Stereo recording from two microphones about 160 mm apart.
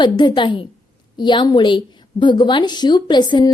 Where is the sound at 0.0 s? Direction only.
30° left (ahead or behind).